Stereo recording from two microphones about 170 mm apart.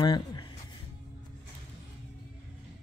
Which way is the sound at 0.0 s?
25° left (ahead or behind).